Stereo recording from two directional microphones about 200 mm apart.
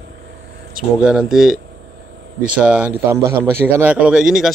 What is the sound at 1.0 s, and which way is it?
A man's voice, 5° right (ahead or behind).